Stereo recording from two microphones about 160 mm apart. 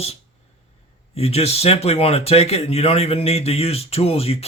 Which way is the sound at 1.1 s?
40° left (ahead or behind).